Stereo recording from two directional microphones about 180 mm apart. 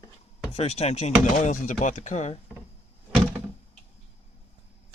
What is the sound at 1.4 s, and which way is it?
Speech, 45° left (ahead or behind).